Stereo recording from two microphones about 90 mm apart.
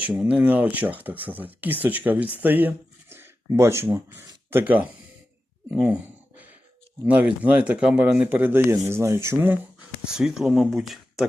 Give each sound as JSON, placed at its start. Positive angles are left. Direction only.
{"t": 0.1, "sound": "speech", "side_deg": -10}
{"t": 4.6, "sound": "speech", "side_deg": -15}
{"t": 5.7, "sound": "a sound", "side_deg": -15}
{"t": 7.0, "sound": "speech", "side_deg": -15}
{"t": 10.1, "sound": "speech", "side_deg": -5}